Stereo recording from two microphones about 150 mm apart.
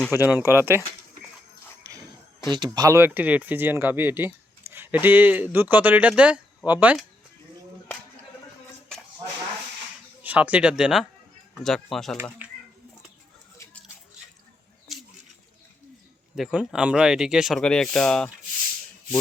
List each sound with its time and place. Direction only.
0.1 s speech: 15° right (ahead or behind)
2.7 s speech: 20° right (ahead or behind)
10.2 s speech: 10° right (ahead or behind)
16.3 s speech: 5° right (ahead or behind)